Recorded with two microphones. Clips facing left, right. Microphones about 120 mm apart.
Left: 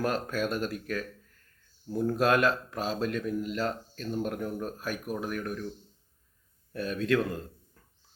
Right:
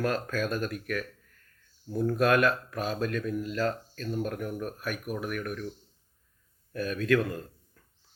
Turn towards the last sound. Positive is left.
turn(degrees=25)  # may be behind; listen again after turning